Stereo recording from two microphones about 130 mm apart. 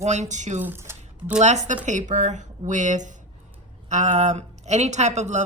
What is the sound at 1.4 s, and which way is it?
A woman's voice, 65° right (ahead or behind).